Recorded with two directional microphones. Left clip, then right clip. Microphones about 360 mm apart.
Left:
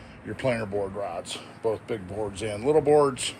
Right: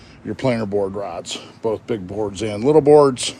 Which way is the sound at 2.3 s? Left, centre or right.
Centre.